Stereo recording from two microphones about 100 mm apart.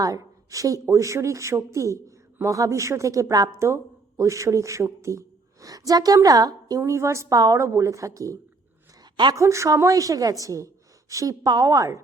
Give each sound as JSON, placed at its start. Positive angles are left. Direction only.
{"t": 0.0, "sound": "speech", "side_deg": -35}